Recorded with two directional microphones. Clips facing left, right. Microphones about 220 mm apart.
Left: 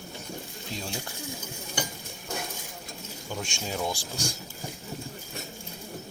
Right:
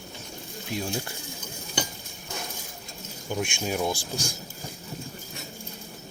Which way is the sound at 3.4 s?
15° right (ahead or behind).